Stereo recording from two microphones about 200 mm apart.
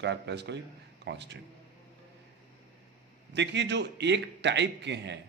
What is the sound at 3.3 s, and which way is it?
A man's voice, 60° right (ahead or behind).